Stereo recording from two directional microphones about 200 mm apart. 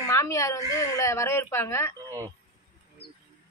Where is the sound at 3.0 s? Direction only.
30° left (ahead or behind).